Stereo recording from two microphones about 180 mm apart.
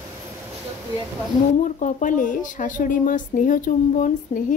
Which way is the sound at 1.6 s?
45° left (ahead or behind).